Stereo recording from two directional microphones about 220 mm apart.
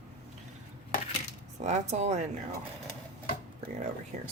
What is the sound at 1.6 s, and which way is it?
Speech, 30° right (ahead or behind).